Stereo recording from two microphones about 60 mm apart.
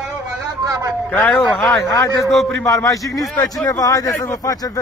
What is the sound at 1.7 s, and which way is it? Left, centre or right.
A man's voice, left.